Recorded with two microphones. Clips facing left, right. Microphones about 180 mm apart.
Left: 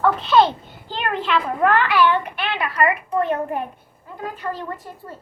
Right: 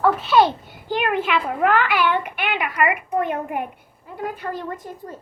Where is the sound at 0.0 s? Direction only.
5° right (ahead or behind).